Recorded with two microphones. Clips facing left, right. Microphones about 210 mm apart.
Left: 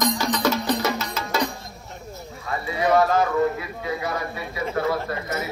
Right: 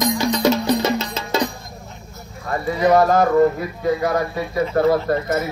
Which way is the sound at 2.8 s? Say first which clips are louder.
Right 4 dB; 40° right (ahead or behind).